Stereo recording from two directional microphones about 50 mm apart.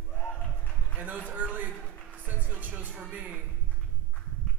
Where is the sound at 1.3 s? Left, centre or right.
Right.